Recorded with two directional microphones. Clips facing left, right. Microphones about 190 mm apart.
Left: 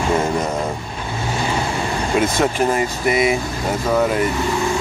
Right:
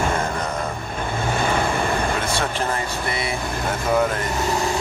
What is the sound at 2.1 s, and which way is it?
Speech, 15° left (ahead or behind).